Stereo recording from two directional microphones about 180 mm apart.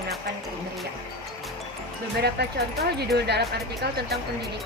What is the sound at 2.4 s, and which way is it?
Speech, 65° right (ahead or behind).